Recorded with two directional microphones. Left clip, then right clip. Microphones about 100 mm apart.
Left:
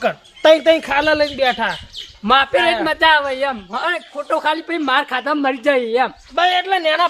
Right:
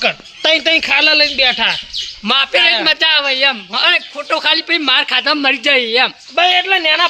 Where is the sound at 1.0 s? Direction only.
15° left (ahead or behind).